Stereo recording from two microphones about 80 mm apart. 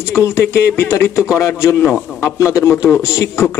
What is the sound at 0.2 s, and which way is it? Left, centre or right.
A man's voice, left.